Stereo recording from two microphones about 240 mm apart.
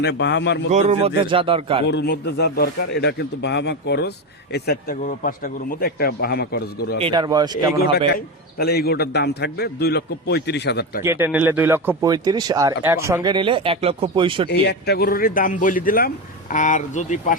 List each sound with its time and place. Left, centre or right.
0.0 s a man's voice: left
0.7 s speech: right
1.9 s a man's voice: left
7.0 s speech: centre
8.1 s a man's voice: left
11.0 s speech: centre
14.5 s a man's voice: left